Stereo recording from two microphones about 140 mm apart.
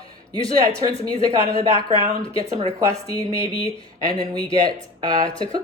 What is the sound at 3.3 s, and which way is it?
Speech, 45° left (ahead or behind).